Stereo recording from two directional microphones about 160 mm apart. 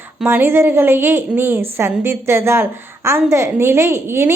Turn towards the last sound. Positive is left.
turn(degrees=-15)  # may be behind; listen again after turning